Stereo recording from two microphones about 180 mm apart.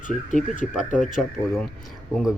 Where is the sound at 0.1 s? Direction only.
45° left (ahead or behind).